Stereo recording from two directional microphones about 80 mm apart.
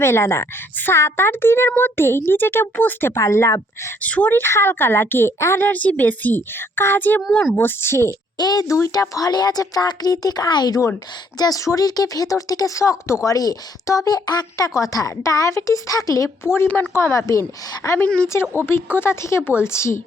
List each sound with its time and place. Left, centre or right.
0.0 s a woman's voice: left
4.0 s a woman's voice: left
8.4 s speech: left
11.3 s speech: left
13.2 s speech: left
16.6 s speech: centre
16.9 s a woman's voice: left
17.8 s a woman's voice: left